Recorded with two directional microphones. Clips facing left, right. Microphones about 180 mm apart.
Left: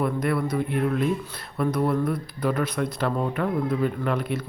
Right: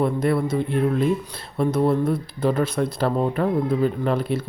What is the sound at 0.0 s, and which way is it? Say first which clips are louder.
Speech: right 4 dB; 25° right (ahead or behind).